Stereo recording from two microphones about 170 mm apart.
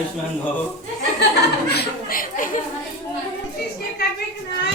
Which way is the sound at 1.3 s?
70° left (ahead or behind).